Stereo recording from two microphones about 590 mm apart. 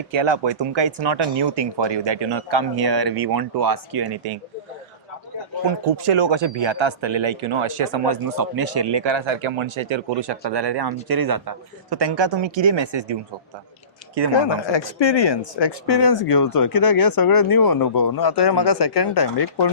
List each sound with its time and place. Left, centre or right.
0.1 s speech: right
6.0 s speech: right
14.3 s speech: left